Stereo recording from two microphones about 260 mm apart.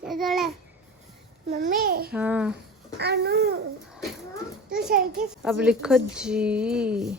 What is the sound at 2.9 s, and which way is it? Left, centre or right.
Babbling, right.